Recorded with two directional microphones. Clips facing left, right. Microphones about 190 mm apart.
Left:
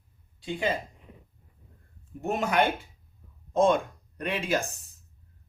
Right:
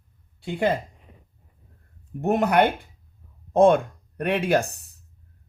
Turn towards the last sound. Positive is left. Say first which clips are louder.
# right 7 dB
turn(degrees=-65)  # may be behind; listen again after turning